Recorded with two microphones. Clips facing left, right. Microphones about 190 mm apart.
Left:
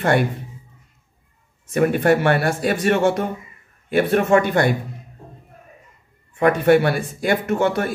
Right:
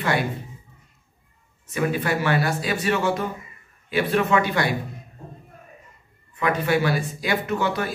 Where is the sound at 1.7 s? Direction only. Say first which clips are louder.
Left 7 dB; 55° left (ahead or behind).